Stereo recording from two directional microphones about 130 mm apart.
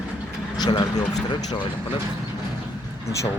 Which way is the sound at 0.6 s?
30° left (ahead or behind).